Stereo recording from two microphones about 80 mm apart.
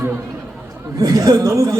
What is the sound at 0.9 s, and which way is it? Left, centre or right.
Speech, right.